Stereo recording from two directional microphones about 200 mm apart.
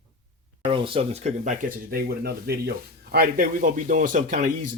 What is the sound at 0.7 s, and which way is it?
Speech, 25° right (ahead or behind).